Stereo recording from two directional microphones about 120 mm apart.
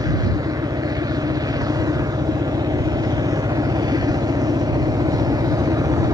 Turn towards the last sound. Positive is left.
turn(degrees=-30)  # may be behind; listen again after turning